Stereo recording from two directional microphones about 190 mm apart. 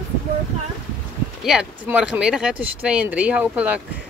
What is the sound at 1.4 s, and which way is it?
Speech, 5° right (ahead or behind).